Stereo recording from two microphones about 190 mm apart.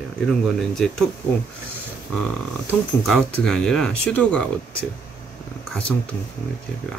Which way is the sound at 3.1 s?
5° left (ahead or behind).